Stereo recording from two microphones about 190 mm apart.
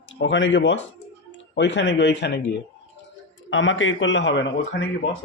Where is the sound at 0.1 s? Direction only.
75° left (ahead or behind).